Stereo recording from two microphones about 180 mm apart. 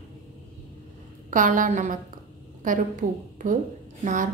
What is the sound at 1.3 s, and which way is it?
A woman's voice, 45° right (ahead or behind).